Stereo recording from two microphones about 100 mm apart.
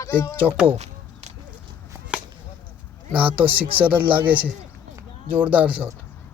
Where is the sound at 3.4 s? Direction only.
65° right (ahead or behind).